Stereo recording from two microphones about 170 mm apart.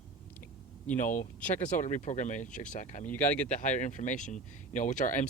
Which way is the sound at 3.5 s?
45° left (ahead or behind).